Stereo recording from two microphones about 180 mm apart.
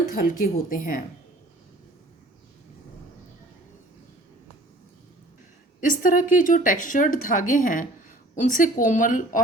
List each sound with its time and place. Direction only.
0.1 s speech: 50° left (ahead or behind)
5.8 s speech: 45° left (ahead or behind)